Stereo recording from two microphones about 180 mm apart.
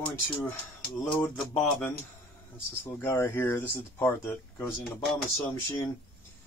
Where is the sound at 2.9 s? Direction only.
10° left (ahead or behind).